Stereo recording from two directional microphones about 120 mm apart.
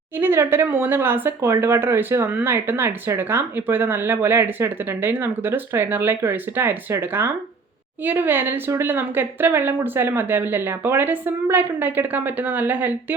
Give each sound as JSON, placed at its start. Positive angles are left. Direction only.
{"t": 0.2, "sound": "a woman's voice", "side_deg": -20}